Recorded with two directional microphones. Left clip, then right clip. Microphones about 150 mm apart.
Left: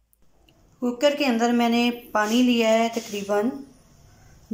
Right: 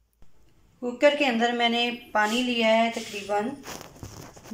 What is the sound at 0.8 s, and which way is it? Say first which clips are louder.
A woman's voice: even; 10° left (ahead or behind).